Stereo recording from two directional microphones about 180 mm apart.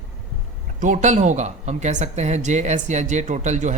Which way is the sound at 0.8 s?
45° right (ahead or behind).